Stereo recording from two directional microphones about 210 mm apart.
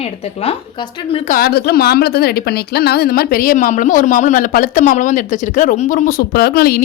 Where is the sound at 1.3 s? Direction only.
45° left (ahead or behind).